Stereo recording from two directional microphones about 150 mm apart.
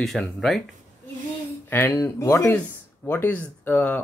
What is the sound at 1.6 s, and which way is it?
Speech, 15° left (ahead or behind).